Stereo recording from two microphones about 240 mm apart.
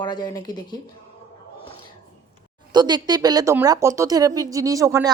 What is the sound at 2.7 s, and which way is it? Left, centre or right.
A woman's voice, centre.